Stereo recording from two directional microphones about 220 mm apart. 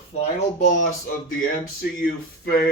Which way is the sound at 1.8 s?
45° left (ahead or behind).